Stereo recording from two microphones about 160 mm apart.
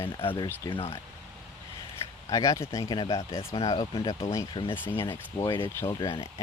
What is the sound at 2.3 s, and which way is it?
Speech, 20° left (ahead or behind).